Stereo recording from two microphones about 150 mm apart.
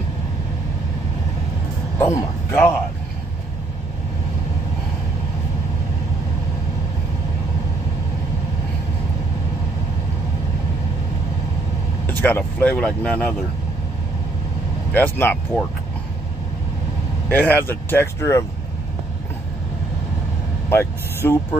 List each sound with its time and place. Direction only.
2.0 s speech: 15° left (ahead or behind)
12.2 s speech: 10° left (ahead or behind)
14.9 s speech: 10° left (ahead or behind)
17.3 s speech: 10° left (ahead or behind)
20.7 s speech: 15° left (ahead or behind)